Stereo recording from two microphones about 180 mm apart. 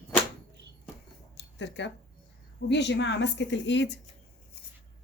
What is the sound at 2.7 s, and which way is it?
Speech, 75° left (ahead or behind).